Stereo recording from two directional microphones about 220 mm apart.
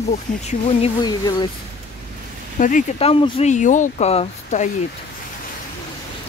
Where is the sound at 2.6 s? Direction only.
35° left (ahead or behind).